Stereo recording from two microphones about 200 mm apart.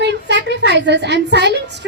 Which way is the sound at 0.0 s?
60° right (ahead or behind).